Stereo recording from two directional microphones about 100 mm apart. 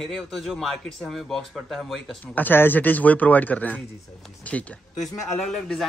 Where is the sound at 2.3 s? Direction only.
20° left (ahead or behind).